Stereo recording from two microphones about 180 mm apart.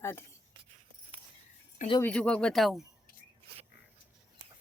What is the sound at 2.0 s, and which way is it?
Speech, 5° left (ahead or behind).